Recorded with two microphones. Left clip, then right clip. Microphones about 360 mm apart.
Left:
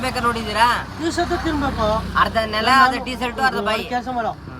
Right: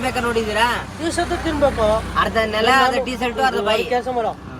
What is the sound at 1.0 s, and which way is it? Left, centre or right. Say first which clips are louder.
Speech: right 1 dB; centre.